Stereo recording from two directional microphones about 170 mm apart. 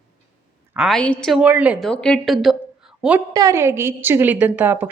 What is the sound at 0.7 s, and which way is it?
A woman's voice, centre (ahead or behind).